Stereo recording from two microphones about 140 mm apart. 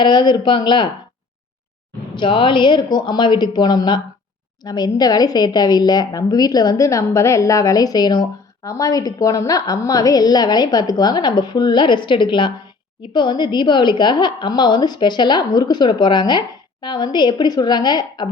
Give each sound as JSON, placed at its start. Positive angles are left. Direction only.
{"t": 0.0, "sound": "a woman's voice", "side_deg": 35}
{"t": 2.1, "sound": "a woman's voice", "side_deg": 35}